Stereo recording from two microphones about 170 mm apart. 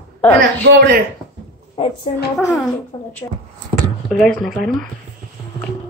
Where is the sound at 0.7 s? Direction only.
70° right (ahead or behind).